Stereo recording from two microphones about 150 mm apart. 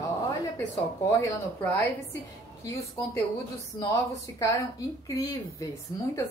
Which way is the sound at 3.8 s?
25° left (ahead or behind).